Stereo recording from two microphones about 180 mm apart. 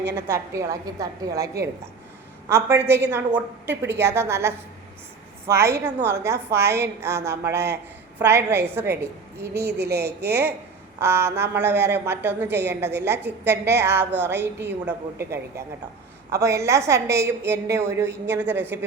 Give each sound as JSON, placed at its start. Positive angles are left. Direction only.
{"t": 0.2, "sound": "a woman's voice", "side_deg": -15}
{"t": 9.6, "sound": "a woman's voice", "side_deg": -65}
{"t": 11.0, "sound": "a woman's voice", "side_deg": -15}